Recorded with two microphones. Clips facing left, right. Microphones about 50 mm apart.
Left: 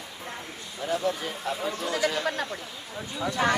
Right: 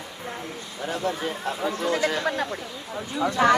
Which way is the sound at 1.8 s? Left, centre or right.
Right.